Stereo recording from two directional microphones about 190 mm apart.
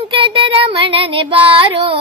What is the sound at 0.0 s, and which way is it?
Female singing, 25° right (ahead or behind).